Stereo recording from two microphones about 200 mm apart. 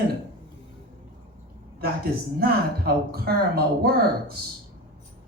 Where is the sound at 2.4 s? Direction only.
50° right (ahead or behind).